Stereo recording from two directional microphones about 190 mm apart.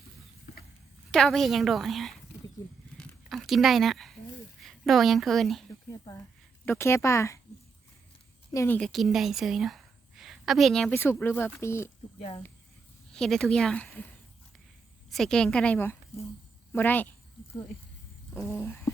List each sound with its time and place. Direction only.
1.1 s a woman's voice: centre (ahead or behind)
3.0 s a sound: centre (ahead or behind)
4.6 s a woman's voice: centre (ahead or behind)
5.9 s a sound: 15° left (ahead or behind)
6.7 s speech: 15° left (ahead or behind)
8.5 s a woman's voice: 10° left (ahead or behind)
13.1 s a woman's voice: centre (ahead or behind)
15.1 s a woman's voice: centre (ahead or behind)
18.3 s speech: 10° left (ahead or behind)